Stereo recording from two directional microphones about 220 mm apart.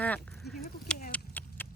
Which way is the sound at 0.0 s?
5° left (ahead or behind).